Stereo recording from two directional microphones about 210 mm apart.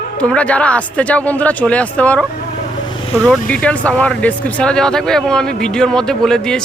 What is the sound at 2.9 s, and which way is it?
Vehicle, 25° left (ahead or behind).